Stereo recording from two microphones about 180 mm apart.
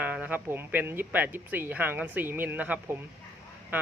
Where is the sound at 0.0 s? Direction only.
10° right (ahead or behind).